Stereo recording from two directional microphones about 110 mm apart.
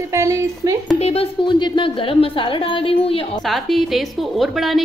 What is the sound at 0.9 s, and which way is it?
Speech, 70° left (ahead or behind).